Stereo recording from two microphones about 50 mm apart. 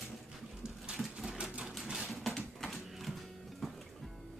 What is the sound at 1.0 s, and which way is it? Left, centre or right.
Sewing machine, centre.